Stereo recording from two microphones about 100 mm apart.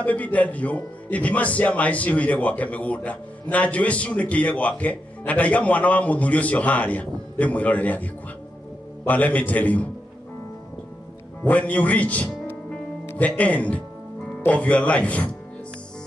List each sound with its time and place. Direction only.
0.0 s speech: 15° left (ahead or behind)
11.4 s speech: 15° left (ahead or behind)